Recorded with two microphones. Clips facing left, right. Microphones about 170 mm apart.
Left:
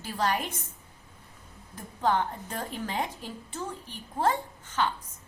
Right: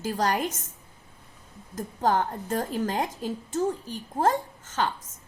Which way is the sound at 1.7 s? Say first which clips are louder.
Right 2 dB; 45° right (ahead or behind).